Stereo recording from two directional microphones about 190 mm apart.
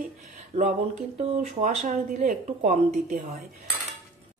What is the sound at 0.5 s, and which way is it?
Speech, 40° right (ahead or behind).